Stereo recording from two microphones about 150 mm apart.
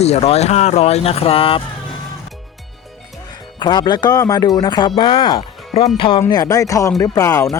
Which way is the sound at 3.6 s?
30° left (ahead or behind).